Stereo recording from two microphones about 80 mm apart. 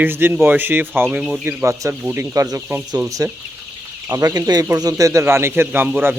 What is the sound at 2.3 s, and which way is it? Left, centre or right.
Speech, right.